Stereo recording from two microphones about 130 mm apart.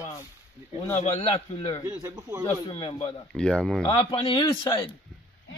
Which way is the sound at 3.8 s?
45° left (ahead or behind).